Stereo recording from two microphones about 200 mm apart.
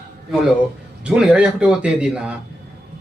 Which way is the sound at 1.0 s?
5° right (ahead or behind).